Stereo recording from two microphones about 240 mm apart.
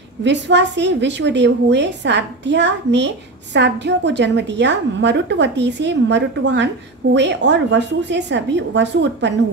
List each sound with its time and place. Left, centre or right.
0.2 s a woman's voice: right